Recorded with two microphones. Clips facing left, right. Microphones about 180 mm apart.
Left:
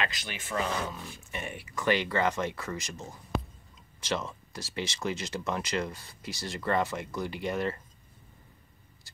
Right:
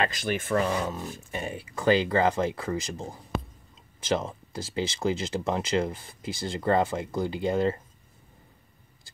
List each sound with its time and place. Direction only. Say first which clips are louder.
0.0 s speech: right 8 dB; 45° right (ahead or behind); by 7.8 s 25° right (ahead or behind)